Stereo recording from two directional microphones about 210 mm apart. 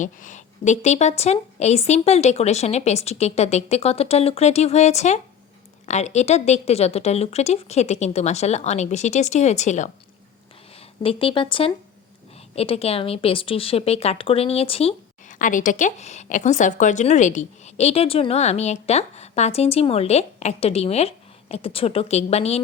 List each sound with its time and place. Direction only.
0.0 s a woman's voice: 35° left (ahead or behind)